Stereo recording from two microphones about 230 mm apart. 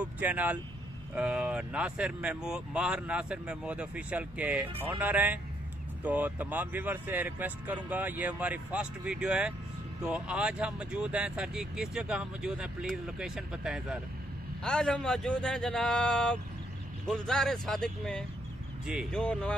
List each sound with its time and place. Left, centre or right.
0.0 s speech: centre